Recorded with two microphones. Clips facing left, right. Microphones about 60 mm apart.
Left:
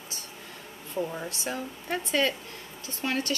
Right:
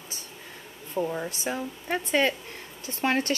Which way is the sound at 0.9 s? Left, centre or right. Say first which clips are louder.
Right 3 dB; centre.